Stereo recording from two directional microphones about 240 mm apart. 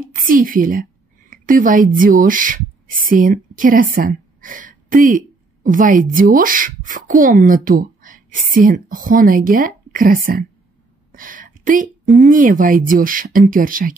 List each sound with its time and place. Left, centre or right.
0.1 s a woman's voice: right
11.1 s a sound: right
12.2 s speech: right